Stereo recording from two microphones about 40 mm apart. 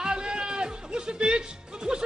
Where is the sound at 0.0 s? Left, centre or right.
Right.